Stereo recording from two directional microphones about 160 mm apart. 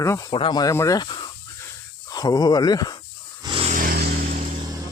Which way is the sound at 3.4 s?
30° right (ahead or behind).